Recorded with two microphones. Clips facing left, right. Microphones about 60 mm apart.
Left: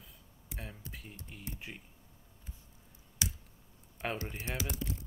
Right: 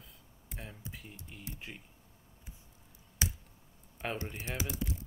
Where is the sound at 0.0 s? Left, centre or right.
Centre.